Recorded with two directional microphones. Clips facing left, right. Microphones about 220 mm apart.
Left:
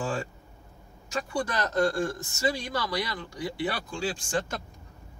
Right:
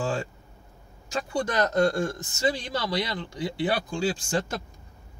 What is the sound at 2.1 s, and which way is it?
Speech, 20° right (ahead or behind).